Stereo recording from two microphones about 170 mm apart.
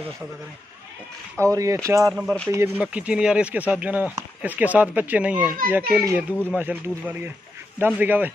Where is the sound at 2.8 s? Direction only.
5° right (ahead or behind).